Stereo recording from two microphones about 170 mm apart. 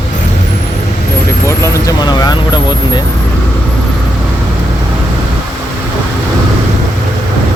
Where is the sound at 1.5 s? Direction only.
15° left (ahead or behind).